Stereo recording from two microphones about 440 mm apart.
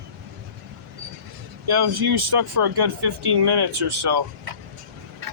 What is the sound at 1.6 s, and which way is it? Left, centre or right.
Speech, right.